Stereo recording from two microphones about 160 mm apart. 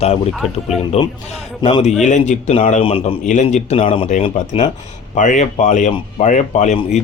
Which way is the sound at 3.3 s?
45° left (ahead or behind).